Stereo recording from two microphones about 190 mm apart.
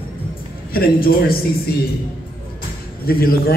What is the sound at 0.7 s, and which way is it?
Speech, 50° left (ahead or behind).